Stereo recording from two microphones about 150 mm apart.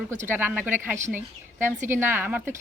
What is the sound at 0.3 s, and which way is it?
A woman's voice, 15° right (ahead or behind).